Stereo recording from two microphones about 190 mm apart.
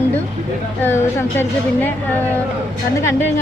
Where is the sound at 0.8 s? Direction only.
15° left (ahead or behind).